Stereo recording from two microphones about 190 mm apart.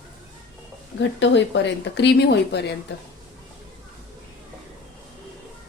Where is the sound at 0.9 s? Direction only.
70° left (ahead or behind).